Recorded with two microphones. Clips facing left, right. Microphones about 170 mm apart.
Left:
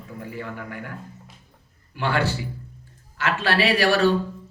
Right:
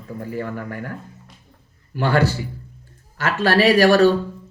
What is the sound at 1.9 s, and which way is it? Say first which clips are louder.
Speech: right 5 dB; 40° right (ahead or behind).